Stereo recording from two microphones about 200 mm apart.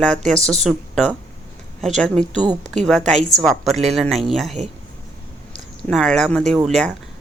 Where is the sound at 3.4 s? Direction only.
Centre (ahead or behind).